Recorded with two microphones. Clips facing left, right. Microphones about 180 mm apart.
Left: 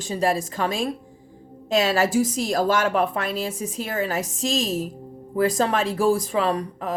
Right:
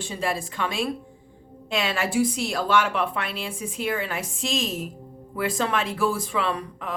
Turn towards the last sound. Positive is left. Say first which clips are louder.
# left 5 dB
turn(degrees=40)  # may be behind; listen again after turning